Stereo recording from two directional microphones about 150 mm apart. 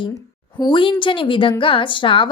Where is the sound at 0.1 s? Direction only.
30° left (ahead or behind).